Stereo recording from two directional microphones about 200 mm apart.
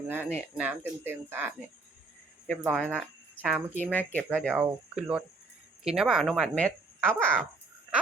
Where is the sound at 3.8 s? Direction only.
10° left (ahead or behind).